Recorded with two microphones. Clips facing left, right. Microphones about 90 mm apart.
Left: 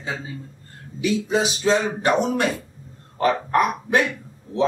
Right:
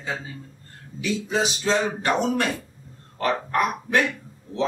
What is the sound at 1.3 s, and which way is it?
Speech, 15° left (ahead or behind).